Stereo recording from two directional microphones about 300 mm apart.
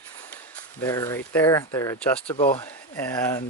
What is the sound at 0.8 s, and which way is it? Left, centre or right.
Speech, centre.